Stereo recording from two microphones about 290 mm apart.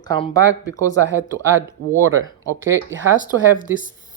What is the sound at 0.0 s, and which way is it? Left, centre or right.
Speech, centre.